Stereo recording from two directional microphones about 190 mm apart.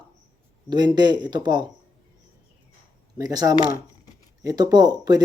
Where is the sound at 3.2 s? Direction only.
20° right (ahead or behind).